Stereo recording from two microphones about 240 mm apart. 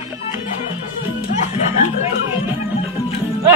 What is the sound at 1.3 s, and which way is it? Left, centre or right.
Music, left.